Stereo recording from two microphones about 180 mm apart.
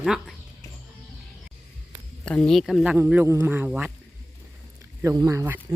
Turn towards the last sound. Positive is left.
turn(degrees=-15)  # may be behind; listen again after turning